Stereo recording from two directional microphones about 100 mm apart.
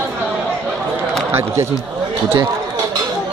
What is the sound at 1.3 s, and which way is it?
Speech, 25° right (ahead or behind).